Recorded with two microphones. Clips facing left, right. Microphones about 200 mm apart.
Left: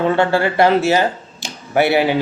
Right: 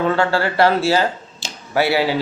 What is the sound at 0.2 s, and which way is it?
Speech, 20° left (ahead or behind).